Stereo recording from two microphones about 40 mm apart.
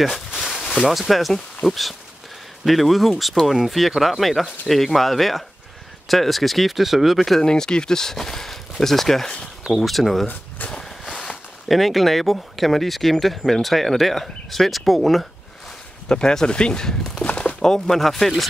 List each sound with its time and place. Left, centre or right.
0.3 s a sound: centre
0.9 s speech: centre
7.4 s speech: centre
9.6 s a sound: centre
9.8 s speech: centre
11.2 s speech: centre
16.1 s speech: centre